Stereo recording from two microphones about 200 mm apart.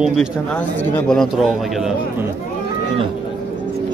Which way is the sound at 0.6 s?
10° left (ahead or behind).